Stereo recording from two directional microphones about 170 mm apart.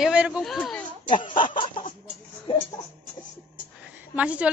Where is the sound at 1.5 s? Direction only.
30° left (ahead or behind).